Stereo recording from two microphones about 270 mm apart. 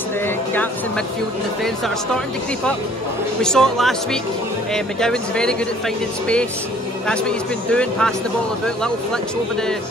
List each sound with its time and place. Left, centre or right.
3.4 s speech: centre
7.1 s speech: centre